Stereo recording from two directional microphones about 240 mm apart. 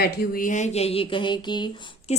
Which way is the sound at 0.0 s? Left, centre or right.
Left.